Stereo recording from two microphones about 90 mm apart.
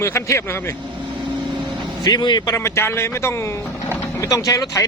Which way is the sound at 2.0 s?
50° left (ahead or behind).